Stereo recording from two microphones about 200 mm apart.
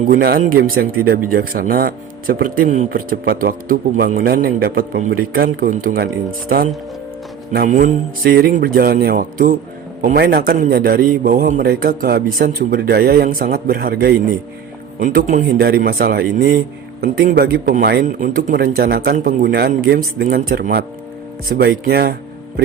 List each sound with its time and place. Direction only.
0.1 s speech: 45° right (ahead or behind)
7.5 s speech: 45° right (ahead or behind)